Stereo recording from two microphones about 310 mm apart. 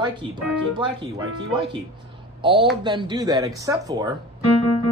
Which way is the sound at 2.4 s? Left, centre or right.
Centre.